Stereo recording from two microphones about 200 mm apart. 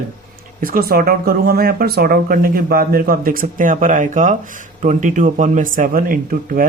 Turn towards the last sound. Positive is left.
turn(degrees=-45)  # may be behind; listen again after turning